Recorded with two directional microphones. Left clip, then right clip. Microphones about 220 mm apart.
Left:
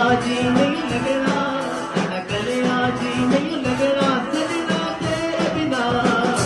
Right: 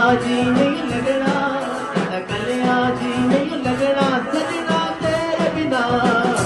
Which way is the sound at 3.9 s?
15° right (ahead or behind).